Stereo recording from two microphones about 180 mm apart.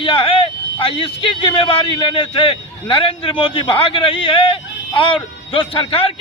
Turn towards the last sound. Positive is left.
turn(degrees=30)  # may be behind; listen again after turning